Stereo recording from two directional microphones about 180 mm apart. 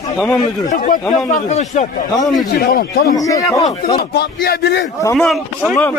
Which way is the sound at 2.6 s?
60° left (ahead or behind).